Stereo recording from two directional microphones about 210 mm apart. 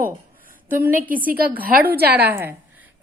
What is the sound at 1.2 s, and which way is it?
A woman's voice, 45° right (ahead or behind).